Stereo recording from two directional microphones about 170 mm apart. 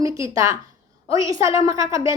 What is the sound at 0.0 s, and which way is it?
A woman's voice, 20° right (ahead or behind).